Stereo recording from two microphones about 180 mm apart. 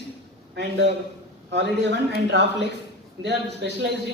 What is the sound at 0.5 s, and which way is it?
Speech, 70° right (ahead or behind).